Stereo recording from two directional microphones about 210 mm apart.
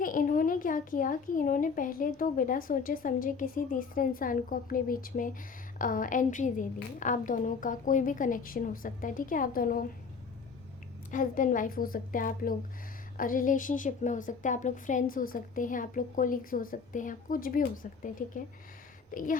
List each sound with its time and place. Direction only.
0.0 s a woman's voice: 40° left (ahead or behind)
11.1 s a woman's voice: 40° left (ahead or behind)